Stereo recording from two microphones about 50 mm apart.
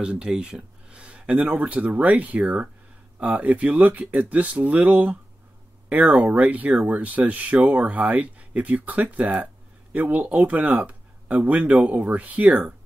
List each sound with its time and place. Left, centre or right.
0.0 s speech: centre